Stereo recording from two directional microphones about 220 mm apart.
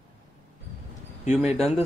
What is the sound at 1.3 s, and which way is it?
Speech, 5° right (ahead or behind).